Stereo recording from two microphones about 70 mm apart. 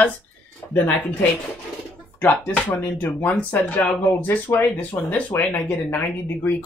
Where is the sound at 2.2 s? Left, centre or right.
Left.